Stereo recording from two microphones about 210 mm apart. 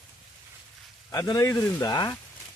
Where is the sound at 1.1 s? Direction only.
15° left (ahead or behind).